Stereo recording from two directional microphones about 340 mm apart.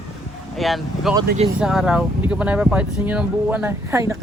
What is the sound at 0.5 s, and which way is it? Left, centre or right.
Speech, centre.